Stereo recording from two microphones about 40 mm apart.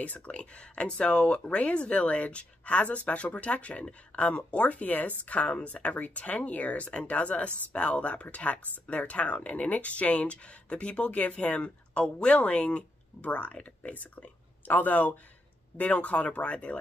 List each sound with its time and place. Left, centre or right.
0.0 s speech: left
12.4 s speech: left